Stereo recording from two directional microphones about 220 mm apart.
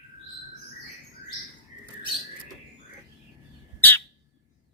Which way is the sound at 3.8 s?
10° left (ahead or behind).